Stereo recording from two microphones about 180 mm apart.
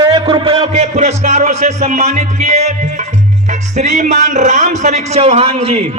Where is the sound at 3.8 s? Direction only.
40° right (ahead or behind).